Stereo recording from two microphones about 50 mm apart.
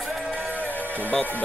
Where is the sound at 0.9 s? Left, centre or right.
Left.